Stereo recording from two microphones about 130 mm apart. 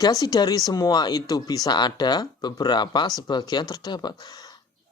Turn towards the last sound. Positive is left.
turn(degrees=30)  # may be behind; listen again after turning